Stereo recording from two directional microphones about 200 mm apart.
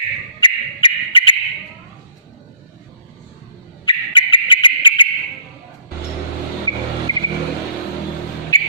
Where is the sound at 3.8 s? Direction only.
25° left (ahead or behind).